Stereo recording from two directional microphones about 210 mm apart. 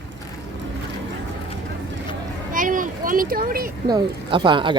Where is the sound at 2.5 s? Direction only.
40° right (ahead or behind).